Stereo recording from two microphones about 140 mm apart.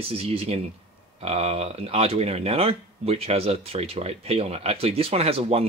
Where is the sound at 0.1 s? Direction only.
45° right (ahead or behind).